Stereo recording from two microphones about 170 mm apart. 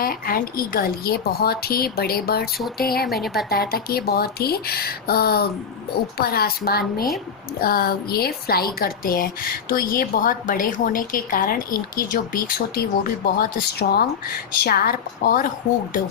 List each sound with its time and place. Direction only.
0.0 s a woman's voice: 55° left (ahead or behind)
3.2 s a woman's voice: centre (ahead or behind)
3.5 s a woman's voice: 65° left (ahead or behind)